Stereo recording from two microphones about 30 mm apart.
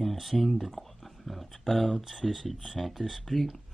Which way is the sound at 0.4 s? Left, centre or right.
Centre.